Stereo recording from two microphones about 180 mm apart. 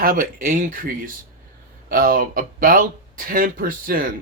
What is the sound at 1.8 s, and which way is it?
Speech, 55° right (ahead or behind).